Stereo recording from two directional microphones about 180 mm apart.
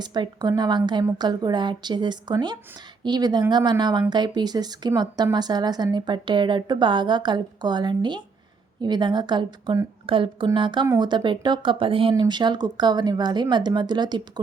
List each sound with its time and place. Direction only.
0.0 s speech: 25° right (ahead or behind)